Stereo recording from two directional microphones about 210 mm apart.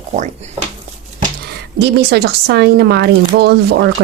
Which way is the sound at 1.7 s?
50° right (ahead or behind).